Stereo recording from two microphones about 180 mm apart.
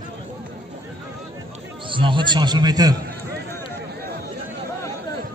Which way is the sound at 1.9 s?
25° right (ahead or behind).